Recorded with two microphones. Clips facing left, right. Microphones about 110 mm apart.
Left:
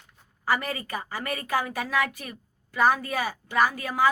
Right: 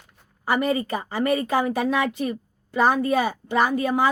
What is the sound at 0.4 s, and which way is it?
A woman's voice, 20° right (ahead or behind).